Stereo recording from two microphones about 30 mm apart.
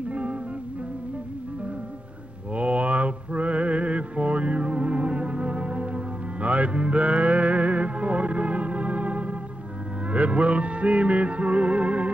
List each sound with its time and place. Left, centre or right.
0.1 s music: right
2.5 s a sound: right
6.4 s music: right